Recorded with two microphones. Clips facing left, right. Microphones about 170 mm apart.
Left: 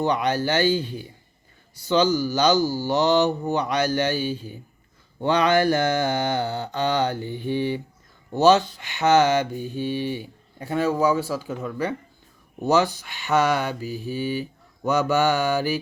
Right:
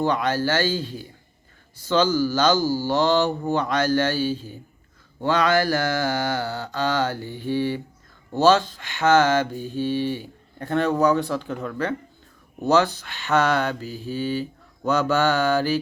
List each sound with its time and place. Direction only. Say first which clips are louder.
0.0 s speech: even; 15° left (ahead or behind)
2.6 s mantra: even; 10° right (ahead or behind)
2.8 s speech: left 1 dB; 15° left (ahead or behind)
5.2 s mantra: left 1 dB; 20° left (ahead or behind)
8.4 s speech: left 1 dB; 15° left (ahead or behind)